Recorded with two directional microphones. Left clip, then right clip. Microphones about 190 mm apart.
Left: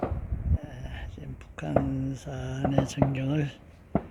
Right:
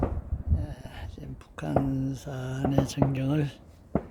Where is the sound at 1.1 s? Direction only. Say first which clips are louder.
Even; 25° right (ahead or behind).